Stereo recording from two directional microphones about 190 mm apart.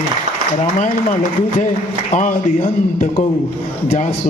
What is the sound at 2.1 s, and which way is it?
A man's voice, 40° left (ahead or behind).